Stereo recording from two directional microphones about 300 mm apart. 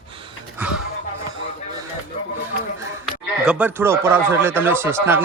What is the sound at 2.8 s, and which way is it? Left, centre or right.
Speech, centre.